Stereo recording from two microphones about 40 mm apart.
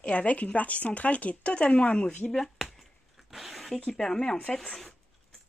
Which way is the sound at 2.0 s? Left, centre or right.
Centre.